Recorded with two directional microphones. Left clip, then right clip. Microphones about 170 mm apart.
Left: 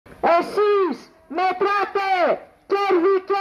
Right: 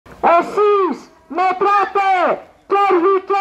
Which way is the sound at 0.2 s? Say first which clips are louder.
Right 5 dB; 10° left (ahead or behind).